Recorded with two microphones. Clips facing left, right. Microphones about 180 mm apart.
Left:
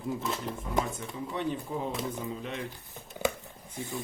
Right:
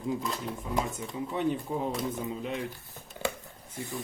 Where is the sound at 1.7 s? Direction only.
25° right (ahead or behind).